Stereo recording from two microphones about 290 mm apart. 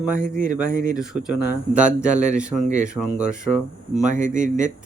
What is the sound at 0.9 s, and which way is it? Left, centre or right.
Speech, centre.